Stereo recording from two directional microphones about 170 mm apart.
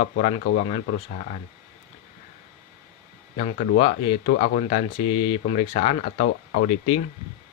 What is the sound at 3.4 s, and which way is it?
A man's voice, 40° left (ahead or behind).